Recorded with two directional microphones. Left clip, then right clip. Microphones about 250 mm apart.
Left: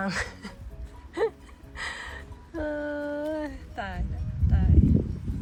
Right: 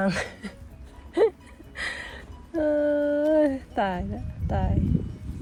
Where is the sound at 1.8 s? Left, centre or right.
Centre.